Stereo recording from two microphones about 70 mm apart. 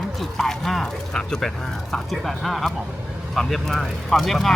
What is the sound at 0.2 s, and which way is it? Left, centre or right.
Speech, centre.